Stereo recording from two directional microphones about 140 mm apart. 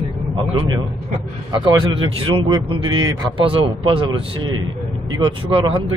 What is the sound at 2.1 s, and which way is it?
A man's voice, 35° right (ahead or behind).